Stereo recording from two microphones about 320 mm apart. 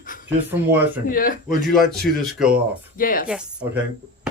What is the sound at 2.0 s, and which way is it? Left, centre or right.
Speech, centre.